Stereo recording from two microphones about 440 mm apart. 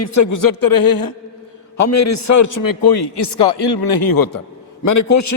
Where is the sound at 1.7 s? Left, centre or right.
Left.